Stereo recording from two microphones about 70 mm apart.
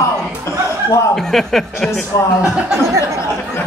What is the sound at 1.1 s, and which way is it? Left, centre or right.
Speech, centre.